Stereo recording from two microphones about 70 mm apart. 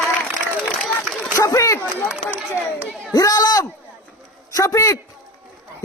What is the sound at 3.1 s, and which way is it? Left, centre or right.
Speech, left.